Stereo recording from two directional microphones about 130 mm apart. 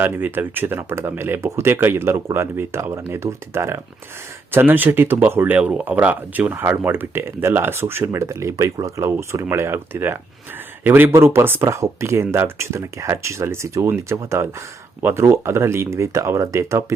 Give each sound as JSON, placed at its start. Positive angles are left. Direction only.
{"t": 0.0, "sound": "speech", "side_deg": -15}